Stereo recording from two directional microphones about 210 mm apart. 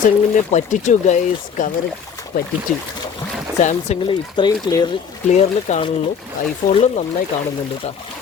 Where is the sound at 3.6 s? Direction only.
35° left (ahead or behind).